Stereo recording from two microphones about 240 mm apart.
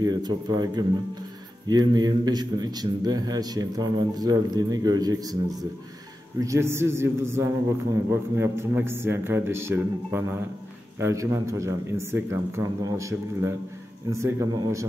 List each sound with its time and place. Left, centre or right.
0.0 s a man's voice: centre